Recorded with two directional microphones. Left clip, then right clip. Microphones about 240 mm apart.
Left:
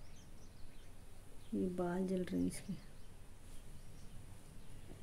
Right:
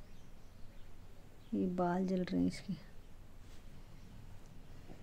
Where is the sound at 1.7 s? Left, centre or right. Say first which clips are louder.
Right 6 dB; centre.